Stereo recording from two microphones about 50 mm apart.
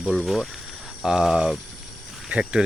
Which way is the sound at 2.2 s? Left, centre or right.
Right.